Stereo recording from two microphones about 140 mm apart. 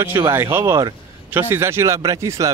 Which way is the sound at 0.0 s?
20° right (ahead or behind).